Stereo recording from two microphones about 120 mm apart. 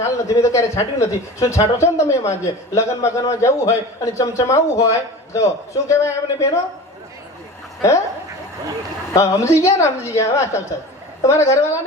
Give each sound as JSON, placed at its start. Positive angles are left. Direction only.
{"t": 0.0, "sound": "a man's voice", "side_deg": 25}
{"t": 7.8, "sound": "speech", "side_deg": 25}
{"t": 9.1, "sound": "a man's voice", "side_deg": 25}